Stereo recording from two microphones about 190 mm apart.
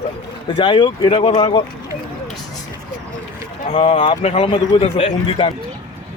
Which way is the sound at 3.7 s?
30° left (ahead or behind).